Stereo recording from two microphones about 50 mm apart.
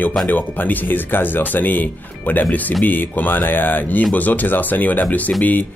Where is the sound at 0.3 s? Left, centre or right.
Left.